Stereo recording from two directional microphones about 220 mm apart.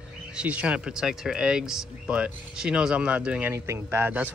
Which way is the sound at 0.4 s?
5° right (ahead or behind).